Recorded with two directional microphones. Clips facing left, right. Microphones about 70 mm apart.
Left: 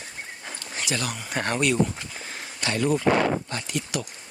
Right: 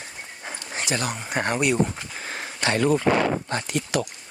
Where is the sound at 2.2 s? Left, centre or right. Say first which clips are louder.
Right 4 dB; right.